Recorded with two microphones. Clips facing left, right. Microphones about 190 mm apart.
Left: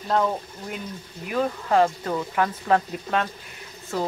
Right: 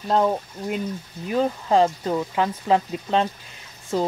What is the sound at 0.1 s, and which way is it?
Speech, 25° right (ahead or behind).